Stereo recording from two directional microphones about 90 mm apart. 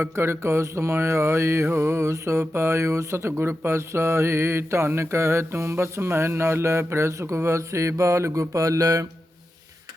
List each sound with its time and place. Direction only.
0.0 s mantra: 25° right (ahead or behind)